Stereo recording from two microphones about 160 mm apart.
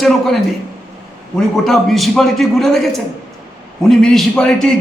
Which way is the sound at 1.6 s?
Centre (ahead or behind).